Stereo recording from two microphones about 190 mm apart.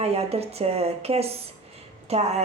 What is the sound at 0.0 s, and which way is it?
Speech, 35° right (ahead or behind).